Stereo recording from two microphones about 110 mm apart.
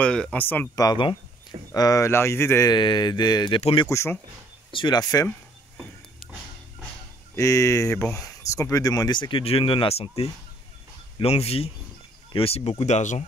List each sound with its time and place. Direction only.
0.0 s speech: 10° left (ahead or behind)
1.7 s speech: 30° left (ahead or behind)
2.7 s speech: 45° left (ahead or behind)
3.9 s speech: 25° left (ahead or behind)
4.7 s speech: 40° left (ahead or behind)
7.3 s speech: 30° left (ahead or behind)
9.4 s speech: 60° left (ahead or behind)
11.1 s speech: 65° left (ahead or behind); by 13.1 s 90° left